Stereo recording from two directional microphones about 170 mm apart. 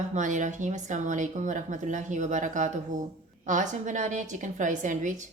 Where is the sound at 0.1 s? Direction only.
45° right (ahead or behind).